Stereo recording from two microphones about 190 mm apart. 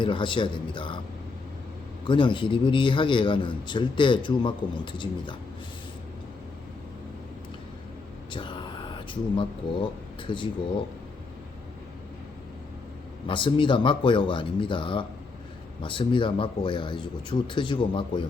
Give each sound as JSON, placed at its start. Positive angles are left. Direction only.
{"t": 0.0, "sound": "a man's voice", "side_deg": 25}
{"t": 2.0, "sound": "a man's voice", "side_deg": 25}
{"t": 8.3, "sound": "a sound", "side_deg": 25}
{"t": 10.2, "sound": "a man's voice", "side_deg": 25}
{"t": 13.2, "sound": "a man's voice", "side_deg": 25}